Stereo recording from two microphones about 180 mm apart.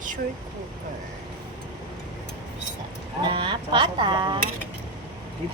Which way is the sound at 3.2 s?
25° right (ahead or behind).